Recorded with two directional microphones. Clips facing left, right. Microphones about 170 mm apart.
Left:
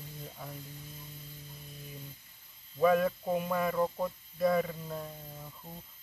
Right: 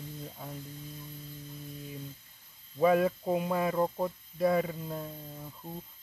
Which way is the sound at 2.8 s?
20° right (ahead or behind).